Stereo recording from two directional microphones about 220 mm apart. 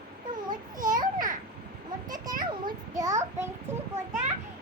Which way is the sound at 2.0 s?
15° right (ahead or behind).